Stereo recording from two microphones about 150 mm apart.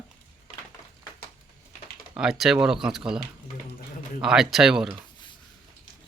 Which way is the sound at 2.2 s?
5° right (ahead or behind).